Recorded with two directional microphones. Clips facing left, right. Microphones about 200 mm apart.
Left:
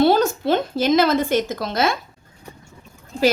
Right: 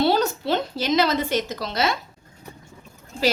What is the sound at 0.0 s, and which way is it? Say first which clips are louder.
A woman's voice: left 4 dB; 50° left (ahead or behind).